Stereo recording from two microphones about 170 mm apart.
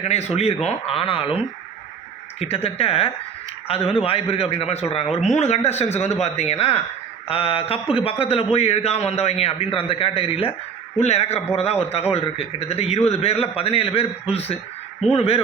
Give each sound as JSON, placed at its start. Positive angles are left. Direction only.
{"t": 0.0, "sound": "a man's voice", "side_deg": 40}
{"t": 2.4, "sound": "a man's voice", "side_deg": 35}